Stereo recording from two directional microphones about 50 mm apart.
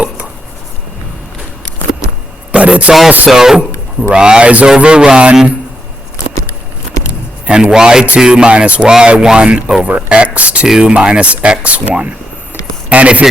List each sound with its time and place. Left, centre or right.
2.5 s a man's voice: right
3.2 s speech: centre
7.1 s a sound: right
8.2 s speech: centre